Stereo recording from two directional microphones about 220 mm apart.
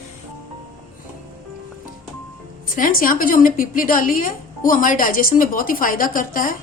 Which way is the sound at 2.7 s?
40° left (ahead or behind).